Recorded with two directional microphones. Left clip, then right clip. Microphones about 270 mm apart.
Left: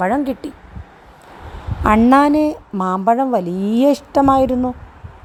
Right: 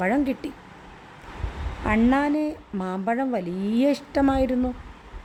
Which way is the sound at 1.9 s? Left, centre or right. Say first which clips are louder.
Left 10 dB; left.